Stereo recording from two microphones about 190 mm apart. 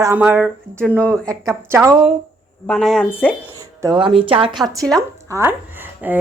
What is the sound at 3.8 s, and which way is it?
Speech, 25° right (ahead or behind).